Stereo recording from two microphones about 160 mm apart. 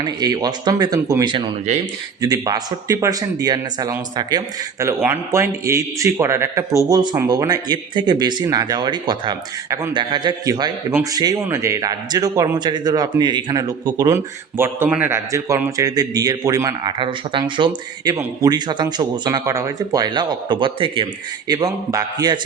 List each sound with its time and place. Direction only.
0.0 s speech: 25° right (ahead or behind)
14.6 s speech: 10° right (ahead or behind)